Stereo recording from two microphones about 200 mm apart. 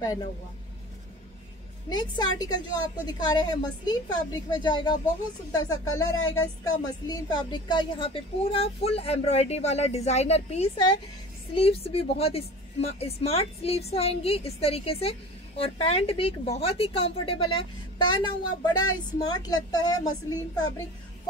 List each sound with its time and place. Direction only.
1.9 s a woman's voice: 20° left (ahead or behind)
6.1 s speech: 85° left
6.4 s a woman's voice: 20° left (ahead or behind)